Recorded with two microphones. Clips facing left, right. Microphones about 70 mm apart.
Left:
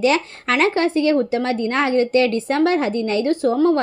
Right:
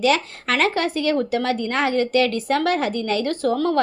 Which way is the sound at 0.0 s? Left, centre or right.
Left.